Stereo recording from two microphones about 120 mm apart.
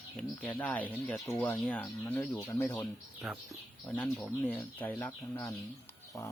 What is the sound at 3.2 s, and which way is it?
Speech, centre (ahead or behind).